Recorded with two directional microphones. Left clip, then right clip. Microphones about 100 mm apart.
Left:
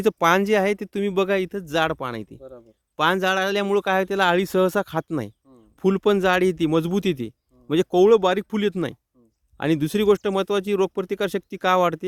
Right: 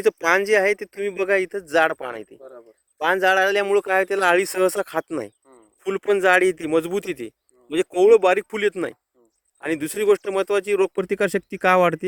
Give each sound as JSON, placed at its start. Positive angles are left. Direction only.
{"t": 0.0, "sound": "speech", "side_deg": 25}
{"t": 2.4, "sound": "speech", "side_deg": 65}
{"t": 3.0, "sound": "a man's voice", "side_deg": 15}
{"t": 4.2, "sound": "a man's voice", "side_deg": 0}